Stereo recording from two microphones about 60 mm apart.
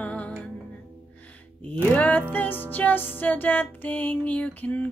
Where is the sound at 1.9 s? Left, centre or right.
Left.